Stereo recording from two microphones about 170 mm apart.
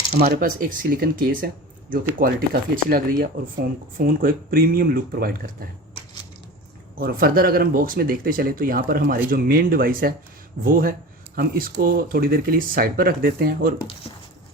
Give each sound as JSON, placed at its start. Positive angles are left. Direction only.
{"t": 0.3, "sound": "speech", "side_deg": -55}
{"t": 6.9, "sound": "speech", "side_deg": -60}